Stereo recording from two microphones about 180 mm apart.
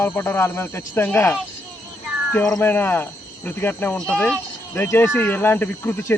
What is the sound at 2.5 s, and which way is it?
Speech, 10° left (ahead or behind).